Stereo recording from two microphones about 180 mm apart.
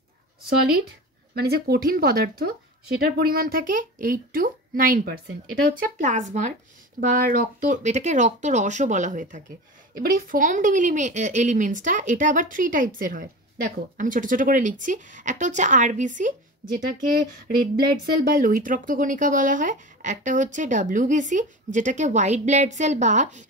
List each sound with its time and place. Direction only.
1.3 s a woman's voice: 60° right (ahead or behind); by 23.4 s 40° right (ahead or behind)